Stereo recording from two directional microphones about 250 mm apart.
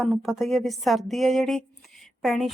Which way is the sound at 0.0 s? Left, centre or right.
Centre.